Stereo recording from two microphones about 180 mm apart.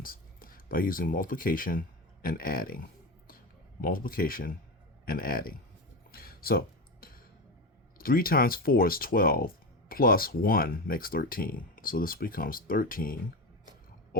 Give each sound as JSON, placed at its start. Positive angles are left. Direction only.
{"t": 0.0, "sound": "speech", "side_deg": 55}
{"t": 6.1, "sound": "a sound", "side_deg": 55}
{"t": 7.9, "sound": "speech", "side_deg": 55}